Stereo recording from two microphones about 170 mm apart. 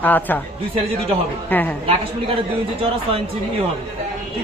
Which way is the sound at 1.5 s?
10° left (ahead or behind).